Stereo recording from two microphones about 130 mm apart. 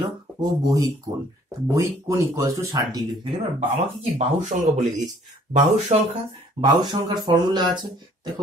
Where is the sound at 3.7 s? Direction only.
60° right (ahead or behind).